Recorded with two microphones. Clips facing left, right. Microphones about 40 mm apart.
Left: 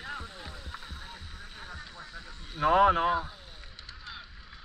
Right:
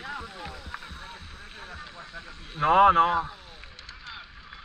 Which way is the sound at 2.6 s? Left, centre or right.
Right.